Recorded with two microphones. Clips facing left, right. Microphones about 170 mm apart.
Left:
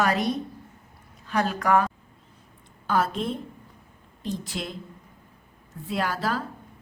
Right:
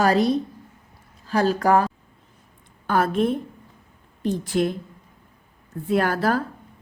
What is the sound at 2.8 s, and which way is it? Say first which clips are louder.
Speech: right 5 dB; 55° right (ahead or behind).